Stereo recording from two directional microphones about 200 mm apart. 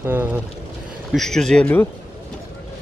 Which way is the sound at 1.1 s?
Centre (ahead or behind).